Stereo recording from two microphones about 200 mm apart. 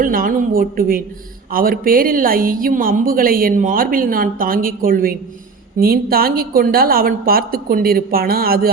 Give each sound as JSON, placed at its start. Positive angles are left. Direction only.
{"t": 0.0, "sound": "a woman's voice", "side_deg": -45}